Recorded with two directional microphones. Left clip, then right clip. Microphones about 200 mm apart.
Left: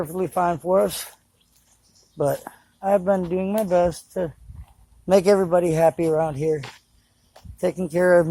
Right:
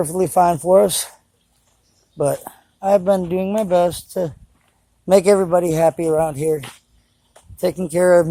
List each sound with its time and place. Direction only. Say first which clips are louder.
0.0 s speech: right 7 dB; 55° right (ahead or behind)
2.1 s speech: right 3 dB; 15° right (ahead or behind)
6.6 s speech: right 3 dB; centre (ahead or behind)
7.5 s speech: right 4 dB; 15° right (ahead or behind)